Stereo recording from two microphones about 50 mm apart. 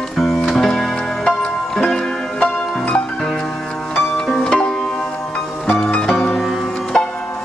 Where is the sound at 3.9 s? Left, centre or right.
Centre.